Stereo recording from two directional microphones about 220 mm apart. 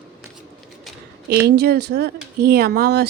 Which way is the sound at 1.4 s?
45° right (ahead or behind).